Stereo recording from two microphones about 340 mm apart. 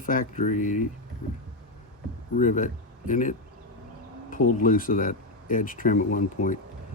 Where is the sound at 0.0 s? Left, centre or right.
Left.